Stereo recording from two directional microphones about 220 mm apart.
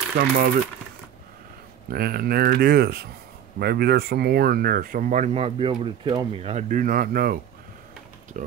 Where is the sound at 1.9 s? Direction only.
45° right (ahead or behind).